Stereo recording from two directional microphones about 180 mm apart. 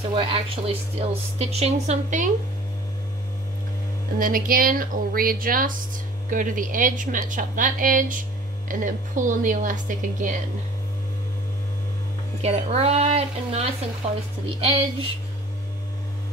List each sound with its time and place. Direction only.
0.1 s a woman's voice: 30° right (ahead or behind)
4.2 s a woman's voice: 50° right (ahead or behind)
12.4 s a woman's voice: 35° right (ahead or behind)